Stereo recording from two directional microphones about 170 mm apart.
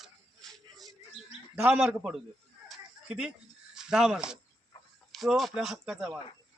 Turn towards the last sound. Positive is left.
turn(degrees=0)  # may be behind; listen again after turning